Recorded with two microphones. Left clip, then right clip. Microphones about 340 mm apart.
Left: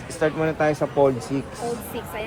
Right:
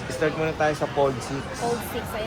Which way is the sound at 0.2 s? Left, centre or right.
Centre.